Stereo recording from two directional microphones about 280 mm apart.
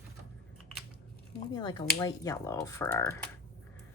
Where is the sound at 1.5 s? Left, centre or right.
Centre.